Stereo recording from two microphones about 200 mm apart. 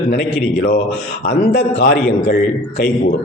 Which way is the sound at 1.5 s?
55° left (ahead or behind).